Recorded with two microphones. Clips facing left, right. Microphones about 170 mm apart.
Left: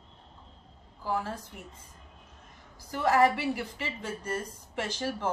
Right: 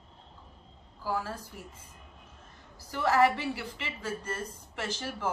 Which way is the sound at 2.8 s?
15° left (ahead or behind).